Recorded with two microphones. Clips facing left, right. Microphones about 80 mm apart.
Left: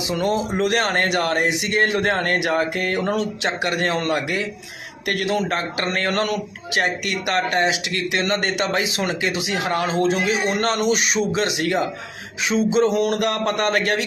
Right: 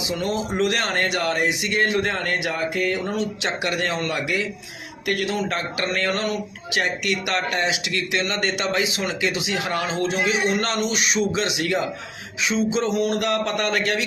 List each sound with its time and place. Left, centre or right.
0.1 s a man's voice: left
3.4 s speech: left
5.2 s speech: left